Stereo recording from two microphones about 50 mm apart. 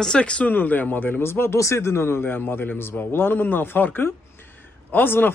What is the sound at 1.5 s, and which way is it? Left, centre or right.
A man's voice, left.